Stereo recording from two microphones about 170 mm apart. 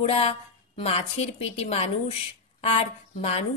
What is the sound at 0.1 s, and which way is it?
Speech, 35° left (ahead or behind).